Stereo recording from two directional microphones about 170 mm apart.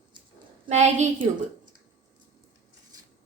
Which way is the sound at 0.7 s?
40° right (ahead or behind).